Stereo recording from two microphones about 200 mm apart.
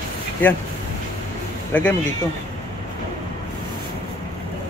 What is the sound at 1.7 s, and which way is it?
Speech, 10° left (ahead or behind).